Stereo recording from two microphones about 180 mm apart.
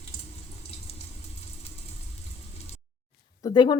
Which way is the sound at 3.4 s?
25° left (ahead or behind).